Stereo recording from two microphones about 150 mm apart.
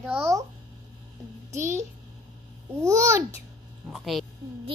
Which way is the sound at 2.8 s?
20° right (ahead or behind).